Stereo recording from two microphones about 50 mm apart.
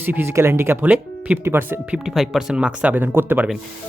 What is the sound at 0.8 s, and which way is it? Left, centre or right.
Speech, right.